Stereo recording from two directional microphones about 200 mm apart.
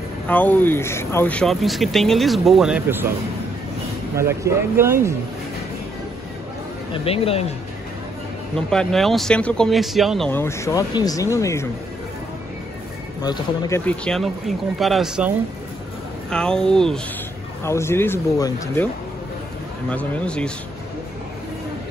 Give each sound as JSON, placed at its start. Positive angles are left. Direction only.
{"t": 0.3, "sound": "speech", "side_deg": 10}
{"t": 4.2, "sound": "speech", "side_deg": -15}
{"t": 6.9, "sound": "speech", "side_deg": 30}
{"t": 8.5, "sound": "speech", "side_deg": 5}
{"t": 13.2, "sound": "speech", "side_deg": 20}
{"t": 19.9, "sound": "speech", "side_deg": 5}